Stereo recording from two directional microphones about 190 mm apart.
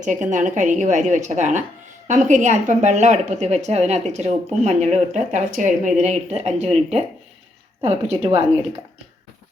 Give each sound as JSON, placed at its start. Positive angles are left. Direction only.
{"t": 0.0, "sound": "a woman's voice", "side_deg": -40}